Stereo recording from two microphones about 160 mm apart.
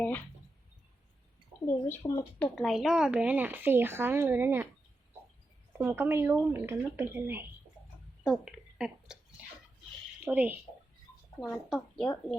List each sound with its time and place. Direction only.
1.9 s speech: 20° left (ahead or behind)
2.4 s a woman's voice: centre (ahead or behind)
5.7 s a woman's voice: 15° right (ahead or behind)
8.2 s a sound: 5° right (ahead or behind)
10.2 s a woman's voice: 10° right (ahead or behind)